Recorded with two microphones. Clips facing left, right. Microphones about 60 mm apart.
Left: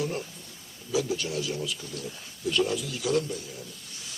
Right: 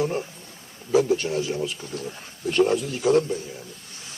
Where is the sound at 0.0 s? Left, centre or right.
Right.